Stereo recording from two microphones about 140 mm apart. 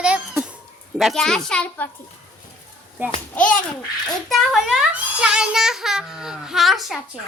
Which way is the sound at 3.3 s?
10° left (ahead or behind).